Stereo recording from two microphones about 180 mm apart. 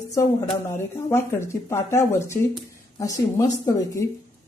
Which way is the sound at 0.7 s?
15° left (ahead or behind).